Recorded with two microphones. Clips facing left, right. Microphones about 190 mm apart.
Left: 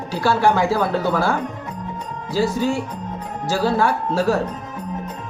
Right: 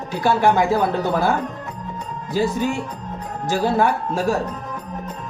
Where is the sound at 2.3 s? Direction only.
20° right (ahead or behind).